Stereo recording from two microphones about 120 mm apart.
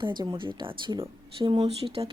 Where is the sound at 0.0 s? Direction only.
40° right (ahead or behind).